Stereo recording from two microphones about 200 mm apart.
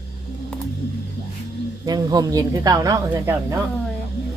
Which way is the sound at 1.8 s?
20° right (ahead or behind).